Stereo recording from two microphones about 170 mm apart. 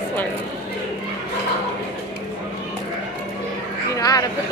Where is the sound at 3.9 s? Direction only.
20° left (ahead or behind).